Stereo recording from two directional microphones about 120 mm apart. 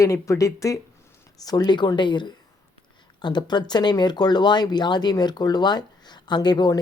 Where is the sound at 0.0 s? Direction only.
25° left (ahead or behind).